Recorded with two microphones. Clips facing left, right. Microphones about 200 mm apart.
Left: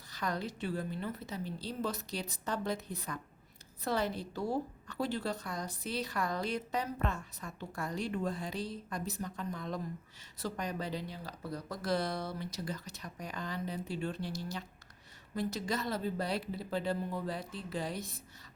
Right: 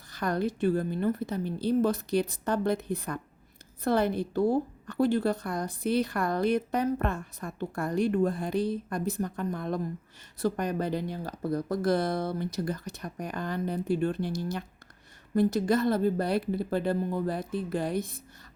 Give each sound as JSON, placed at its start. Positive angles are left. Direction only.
{"t": 0.1, "sound": "a woman's voice", "side_deg": -55}